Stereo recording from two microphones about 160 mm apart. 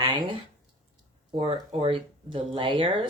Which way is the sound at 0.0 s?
30° right (ahead or behind).